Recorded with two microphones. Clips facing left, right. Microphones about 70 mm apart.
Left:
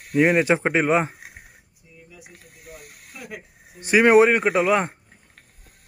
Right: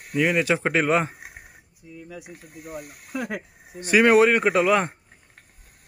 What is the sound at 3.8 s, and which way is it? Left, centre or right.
Speech, centre.